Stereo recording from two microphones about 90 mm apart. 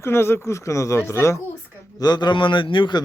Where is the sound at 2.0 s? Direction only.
50° left (ahead or behind).